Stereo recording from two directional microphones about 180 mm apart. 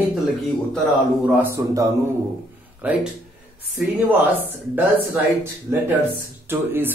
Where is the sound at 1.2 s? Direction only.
10° right (ahead or behind).